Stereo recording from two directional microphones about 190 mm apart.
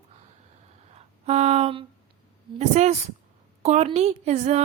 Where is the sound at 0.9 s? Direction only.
35° right (ahead or behind).